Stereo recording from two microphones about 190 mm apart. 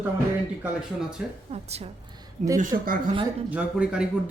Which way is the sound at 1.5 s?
35° right (ahead or behind).